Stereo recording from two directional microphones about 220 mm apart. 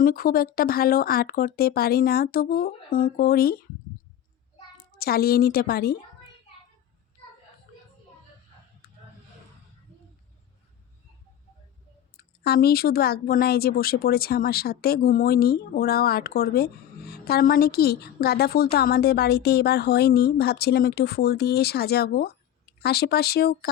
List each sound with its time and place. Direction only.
0.0 s speech: 40° left (ahead or behind)
4.8 s a woman's voice: 45° left (ahead or behind)
8.8 s a sound: 40° left (ahead or behind)
12.1 s speech: 45° left (ahead or behind)